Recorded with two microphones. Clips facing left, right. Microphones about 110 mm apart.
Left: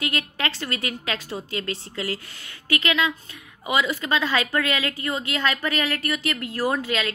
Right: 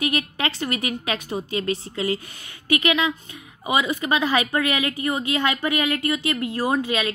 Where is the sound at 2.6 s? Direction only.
15° right (ahead or behind).